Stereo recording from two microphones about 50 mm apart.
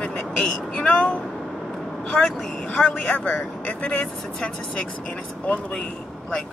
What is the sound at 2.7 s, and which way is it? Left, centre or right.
Speech, left.